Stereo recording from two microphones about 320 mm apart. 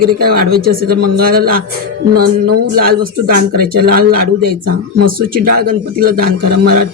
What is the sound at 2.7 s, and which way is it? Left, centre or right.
Speech, right.